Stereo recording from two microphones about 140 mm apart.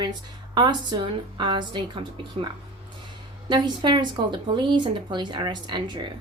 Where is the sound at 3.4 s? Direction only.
30° right (ahead or behind).